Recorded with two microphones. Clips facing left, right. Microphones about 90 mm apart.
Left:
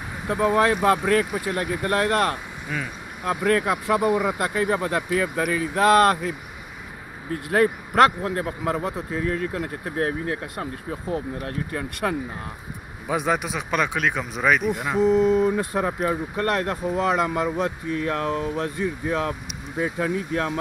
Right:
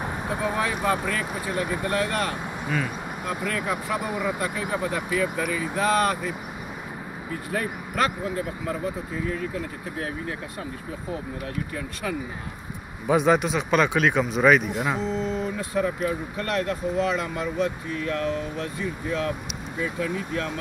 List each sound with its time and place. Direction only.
0.4 s speech: 60° left (ahead or behind)
3.8 s speech: 70° left (ahead or behind)
7.5 s speech: 65° left (ahead or behind)
13.1 s speech: 5° left (ahead or behind)
15.2 s speech: 55° left (ahead or behind)